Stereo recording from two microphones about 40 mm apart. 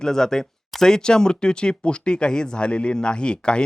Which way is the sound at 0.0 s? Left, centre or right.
Centre.